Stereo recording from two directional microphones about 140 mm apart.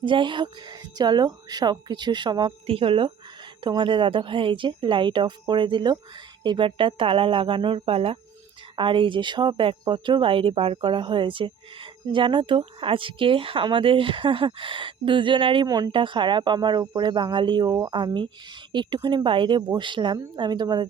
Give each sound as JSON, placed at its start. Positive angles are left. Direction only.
{"t": 0.0, "sound": "speech", "side_deg": -35}